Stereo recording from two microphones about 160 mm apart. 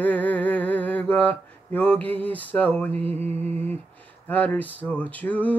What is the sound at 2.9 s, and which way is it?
Mantra, 40° right (ahead or behind).